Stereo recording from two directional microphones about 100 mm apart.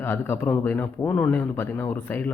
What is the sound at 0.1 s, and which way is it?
Speech, 20° left (ahead or behind).